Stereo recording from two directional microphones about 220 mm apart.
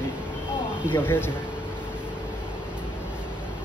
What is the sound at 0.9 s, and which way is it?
Speech, 10° left (ahead or behind).